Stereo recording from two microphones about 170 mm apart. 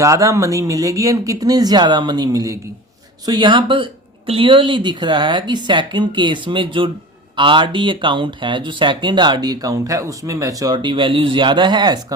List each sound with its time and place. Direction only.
0.0 s speech: 20° right (ahead or behind)